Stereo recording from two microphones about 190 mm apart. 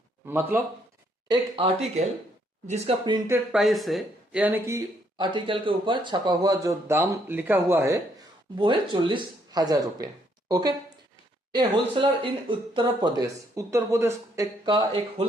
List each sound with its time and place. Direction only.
0.3 s speech: 10° right (ahead or behind)
1.3 s speech: 30° right (ahead or behind)
3.2 s speech: 10° right (ahead or behind)
3.6 s speech: centre (ahead or behind)
8.5 s speech: 25° right (ahead or behind)